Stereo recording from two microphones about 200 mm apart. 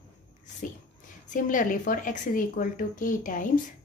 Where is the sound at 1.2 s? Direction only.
40° left (ahead or behind).